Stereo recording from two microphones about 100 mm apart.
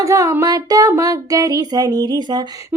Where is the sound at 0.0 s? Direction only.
30° right (ahead or behind).